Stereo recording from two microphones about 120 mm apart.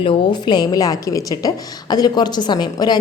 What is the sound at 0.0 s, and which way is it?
A woman's voice, 45° left (ahead or behind).